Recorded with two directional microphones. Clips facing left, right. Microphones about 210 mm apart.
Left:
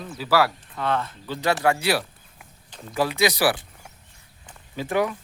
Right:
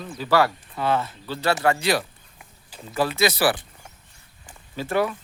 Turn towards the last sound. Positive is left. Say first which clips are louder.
# even
turn(degrees=15)  # may be behind; listen again after turning